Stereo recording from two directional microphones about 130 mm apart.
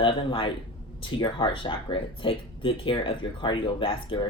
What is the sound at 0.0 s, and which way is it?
Speech, 40° left (ahead or behind).